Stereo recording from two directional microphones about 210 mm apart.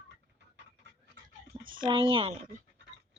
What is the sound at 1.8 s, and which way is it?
Speech, 20° right (ahead or behind).